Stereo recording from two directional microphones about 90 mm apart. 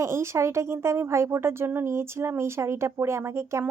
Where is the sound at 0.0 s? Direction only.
35° right (ahead or behind).